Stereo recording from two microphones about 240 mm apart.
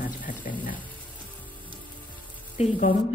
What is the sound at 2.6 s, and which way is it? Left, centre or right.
Speech, left.